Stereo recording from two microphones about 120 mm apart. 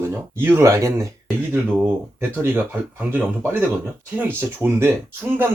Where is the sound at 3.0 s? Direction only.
15° right (ahead or behind).